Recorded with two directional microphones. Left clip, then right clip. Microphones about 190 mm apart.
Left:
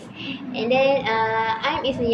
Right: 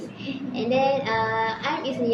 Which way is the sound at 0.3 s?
20° left (ahead or behind).